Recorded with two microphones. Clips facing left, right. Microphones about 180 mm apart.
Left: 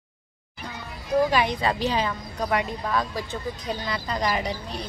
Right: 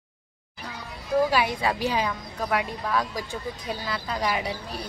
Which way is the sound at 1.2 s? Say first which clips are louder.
Left 1 dB; 10° right (ahead or behind).